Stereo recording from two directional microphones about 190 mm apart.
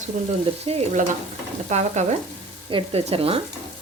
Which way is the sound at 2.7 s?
30° right (ahead or behind).